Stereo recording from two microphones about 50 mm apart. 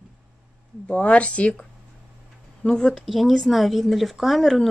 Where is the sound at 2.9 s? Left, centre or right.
Centre.